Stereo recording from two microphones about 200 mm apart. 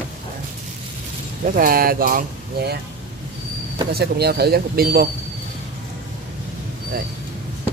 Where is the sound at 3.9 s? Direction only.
50° right (ahead or behind).